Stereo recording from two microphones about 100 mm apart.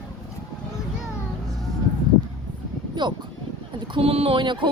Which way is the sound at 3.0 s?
50° right (ahead or behind).